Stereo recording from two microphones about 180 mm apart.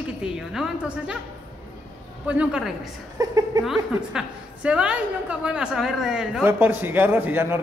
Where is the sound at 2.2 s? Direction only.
5° right (ahead or behind).